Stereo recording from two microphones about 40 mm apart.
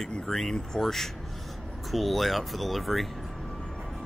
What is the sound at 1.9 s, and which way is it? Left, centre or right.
Speech, centre.